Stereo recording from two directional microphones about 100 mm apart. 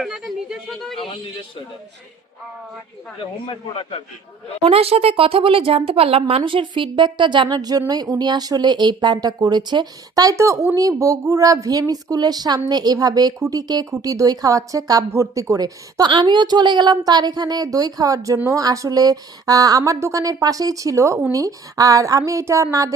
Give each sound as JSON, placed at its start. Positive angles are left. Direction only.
{"t": 0.0, "sound": "speech", "side_deg": 0}
{"t": 3.4, "sound": "a man's voice", "side_deg": 65}
{"t": 4.6, "sound": "a woman's voice", "side_deg": -75}